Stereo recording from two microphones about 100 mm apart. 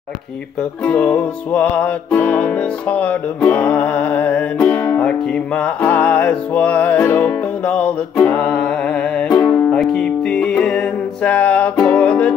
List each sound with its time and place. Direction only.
0.8 s music: 15° left (ahead or behind)